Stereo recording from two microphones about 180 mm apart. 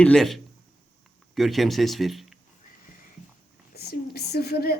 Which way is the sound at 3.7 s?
60° left (ahead or behind).